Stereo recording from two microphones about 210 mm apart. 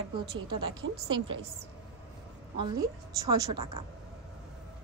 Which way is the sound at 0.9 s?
90° right.